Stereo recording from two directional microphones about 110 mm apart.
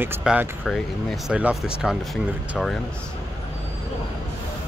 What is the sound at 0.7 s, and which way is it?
Speech, centre (ahead or behind).